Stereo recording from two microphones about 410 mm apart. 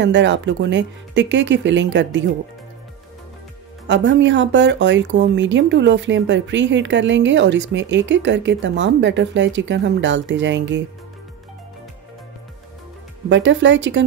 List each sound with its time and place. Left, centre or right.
0.0 s speech: right
3.8 s speech: right
13.3 s speech: right